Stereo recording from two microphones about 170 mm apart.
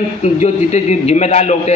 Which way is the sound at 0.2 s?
40° left (ahead or behind).